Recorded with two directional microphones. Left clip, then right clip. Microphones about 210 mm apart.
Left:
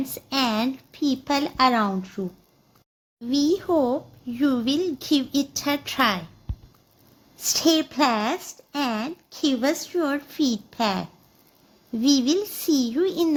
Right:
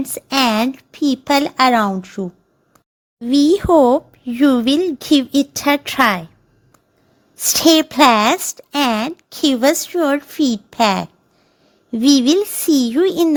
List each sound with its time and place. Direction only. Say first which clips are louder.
0.1 s speech: right 10 dB; 45° right (ahead or behind)
7.4 s speech: right 8 dB; 50° right (ahead or behind)